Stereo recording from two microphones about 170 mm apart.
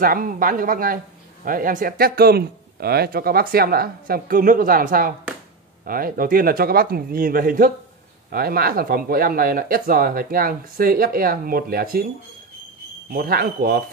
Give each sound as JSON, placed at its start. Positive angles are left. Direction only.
{"t": 0.0, "sound": "speech", "side_deg": -55}
{"t": 13.1, "sound": "speech", "side_deg": -60}